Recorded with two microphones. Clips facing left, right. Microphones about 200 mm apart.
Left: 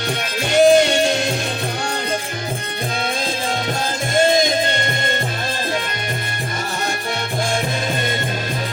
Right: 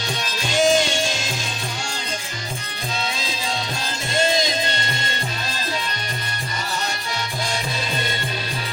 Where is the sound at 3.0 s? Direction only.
55° left (ahead or behind).